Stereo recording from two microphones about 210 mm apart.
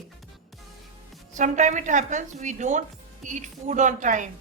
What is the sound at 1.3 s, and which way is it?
Speech, 35° right (ahead or behind).